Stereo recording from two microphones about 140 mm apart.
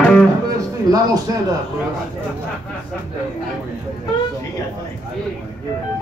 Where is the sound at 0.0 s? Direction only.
10° left (ahead or behind).